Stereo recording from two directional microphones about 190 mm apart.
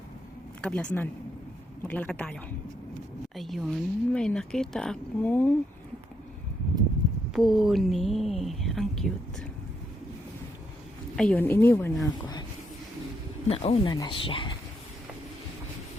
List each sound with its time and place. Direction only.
0.6 s a woman's voice: 5° left (ahead or behind)
7.3 s speech: centre (ahead or behind)
11.2 s a woman's voice: 10° left (ahead or behind)
13.5 s speech: 30° left (ahead or behind)